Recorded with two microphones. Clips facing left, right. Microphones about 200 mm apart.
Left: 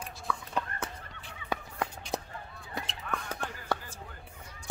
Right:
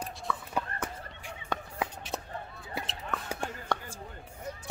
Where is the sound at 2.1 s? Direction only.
15° left (ahead or behind).